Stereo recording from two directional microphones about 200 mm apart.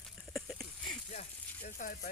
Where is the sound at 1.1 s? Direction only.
40° left (ahead or behind).